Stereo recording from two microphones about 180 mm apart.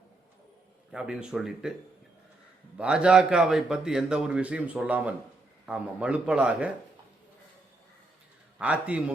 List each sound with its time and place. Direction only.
0.9 s a man's voice: 5° right (ahead or behind)
2.7 s a man's voice: 5° right (ahead or behind)
8.5 s a man's voice: 5° right (ahead or behind)